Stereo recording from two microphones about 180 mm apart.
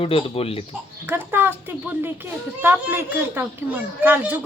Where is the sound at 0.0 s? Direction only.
30° left (ahead or behind).